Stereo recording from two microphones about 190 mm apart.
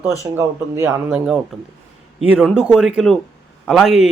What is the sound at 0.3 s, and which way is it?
Speech, 15° right (ahead or behind).